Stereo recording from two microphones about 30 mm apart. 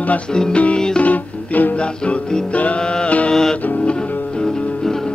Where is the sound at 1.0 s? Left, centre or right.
Left.